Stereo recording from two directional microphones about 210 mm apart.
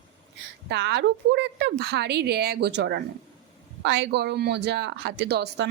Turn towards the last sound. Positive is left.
turn(degrees=-55)  # may be behind; listen again after turning